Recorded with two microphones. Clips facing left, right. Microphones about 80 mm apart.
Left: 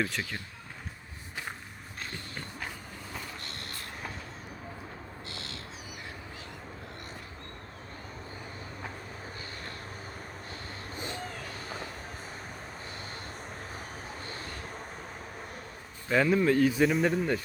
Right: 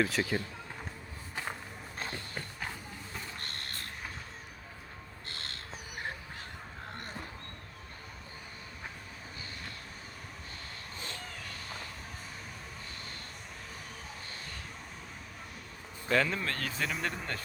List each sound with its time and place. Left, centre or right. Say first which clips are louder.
0.0 s speech: right 3 dB; centre
3.4 s a sound: left 1 dB; right
5.3 s bird: right 1 dB; right
16.0 s speech: left 6 dB; centre
16.9 s speech: left 9 dB; centre